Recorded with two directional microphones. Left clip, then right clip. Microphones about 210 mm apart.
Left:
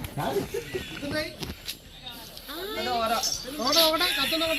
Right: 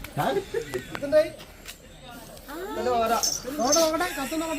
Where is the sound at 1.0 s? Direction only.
45° right (ahead or behind).